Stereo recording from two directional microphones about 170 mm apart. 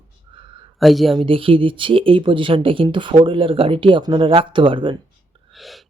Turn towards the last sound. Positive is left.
turn(degrees=0)  # may be behind; listen again after turning